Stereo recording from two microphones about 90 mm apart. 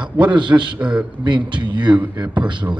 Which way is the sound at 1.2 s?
60° right (ahead or behind).